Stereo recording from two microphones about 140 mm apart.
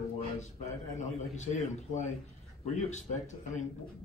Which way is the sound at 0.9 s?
60° left (ahead or behind).